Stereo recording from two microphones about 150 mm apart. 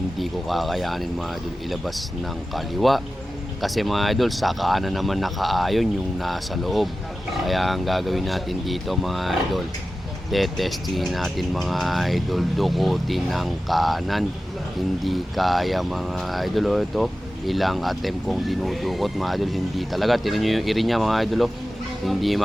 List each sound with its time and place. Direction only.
0.2 s speech: centre (ahead or behind)